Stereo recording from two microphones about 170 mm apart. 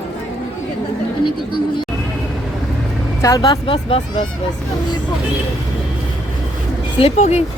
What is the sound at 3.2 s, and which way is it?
Speech, 20° left (ahead or behind).